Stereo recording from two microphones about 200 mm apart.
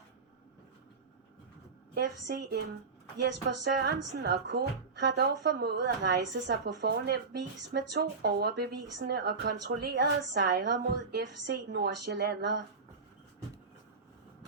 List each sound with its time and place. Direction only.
2.0 s speech: 60° right (ahead or behind)